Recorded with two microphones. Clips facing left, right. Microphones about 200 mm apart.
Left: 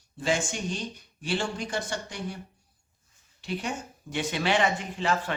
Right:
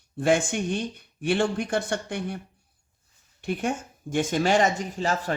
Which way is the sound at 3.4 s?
50° right (ahead or behind).